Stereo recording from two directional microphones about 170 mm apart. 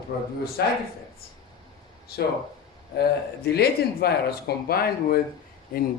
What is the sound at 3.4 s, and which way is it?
A man's voice, 70° left (ahead or behind).